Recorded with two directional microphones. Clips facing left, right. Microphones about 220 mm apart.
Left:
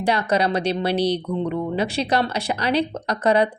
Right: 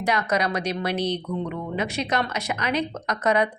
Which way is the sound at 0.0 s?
30° left (ahead or behind).